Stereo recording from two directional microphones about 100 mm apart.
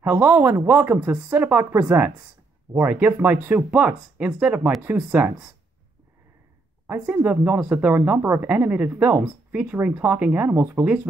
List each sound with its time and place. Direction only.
0.0 s speech: 20° right (ahead or behind)
6.9 s speech: 15° right (ahead or behind)